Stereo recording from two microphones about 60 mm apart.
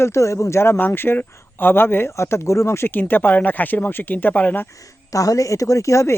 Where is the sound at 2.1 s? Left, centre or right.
Left.